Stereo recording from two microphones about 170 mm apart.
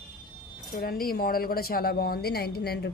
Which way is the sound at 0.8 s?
60° left (ahead or behind).